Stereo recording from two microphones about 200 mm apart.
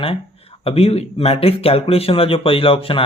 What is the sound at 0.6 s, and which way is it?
Speech, 30° left (ahead or behind).